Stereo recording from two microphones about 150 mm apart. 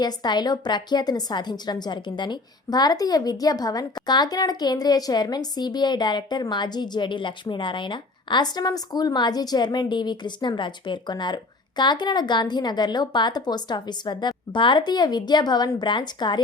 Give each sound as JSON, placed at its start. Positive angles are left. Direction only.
{"t": 0.0, "sound": "a woman's voice", "side_deg": 30}